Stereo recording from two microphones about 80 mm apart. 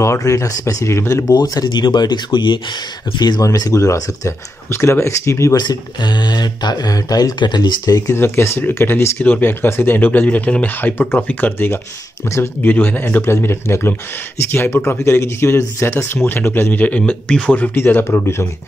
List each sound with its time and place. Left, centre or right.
0.0 s speech: left
1.3 s speech: left
3.4 s speech: left
5.6 s speech: left
8.1 s speech: left; by 11.5 s centre
11.5 s speech: left
17.7 s speech: left